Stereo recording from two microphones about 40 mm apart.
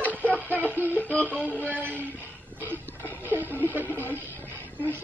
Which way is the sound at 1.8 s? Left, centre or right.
Right.